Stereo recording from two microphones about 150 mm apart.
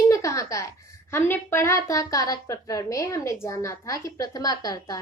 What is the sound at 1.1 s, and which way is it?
A woman's voice, 15° left (ahead or behind).